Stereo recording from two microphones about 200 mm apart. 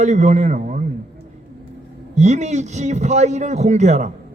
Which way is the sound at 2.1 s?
35° right (ahead or behind).